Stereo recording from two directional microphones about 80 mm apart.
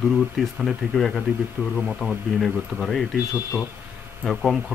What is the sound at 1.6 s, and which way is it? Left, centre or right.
Speech, centre.